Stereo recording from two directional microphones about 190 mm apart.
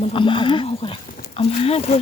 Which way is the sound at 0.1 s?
25° left (ahead or behind).